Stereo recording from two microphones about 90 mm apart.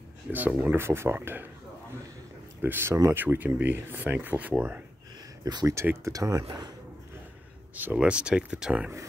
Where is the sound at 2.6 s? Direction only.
20° right (ahead or behind).